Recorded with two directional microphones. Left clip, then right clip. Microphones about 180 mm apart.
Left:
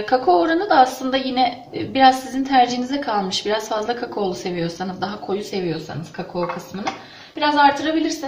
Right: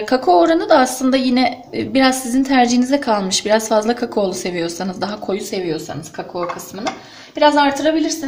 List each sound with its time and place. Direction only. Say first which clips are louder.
0.1 s a woman's voice: right 4 dB; 50° right (ahead or behind)
7.3 s a woman's voice: right 2 dB; 50° right (ahead or behind)